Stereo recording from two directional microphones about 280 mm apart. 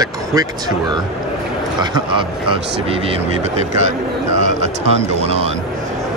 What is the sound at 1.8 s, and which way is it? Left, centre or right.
Speech, centre.